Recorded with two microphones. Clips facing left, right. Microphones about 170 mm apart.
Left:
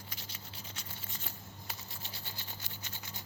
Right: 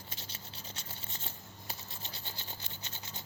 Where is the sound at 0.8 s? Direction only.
25° right (ahead or behind).